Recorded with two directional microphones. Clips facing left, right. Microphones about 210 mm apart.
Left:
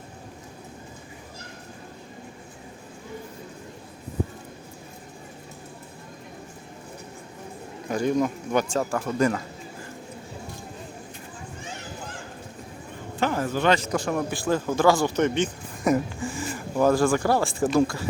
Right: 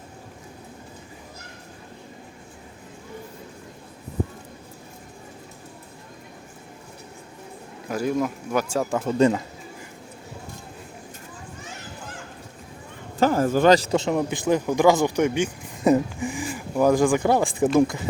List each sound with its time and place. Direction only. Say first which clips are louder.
7.9 s speech: left 1 dB; 5° right (ahead or behind)
9.0 s a man's voice: right 5 dB; 25° right (ahead or behind)
13.1 s a man's voice: right 6 dB; 40° right (ahead or behind); by 18.0 s 20° right (ahead or behind)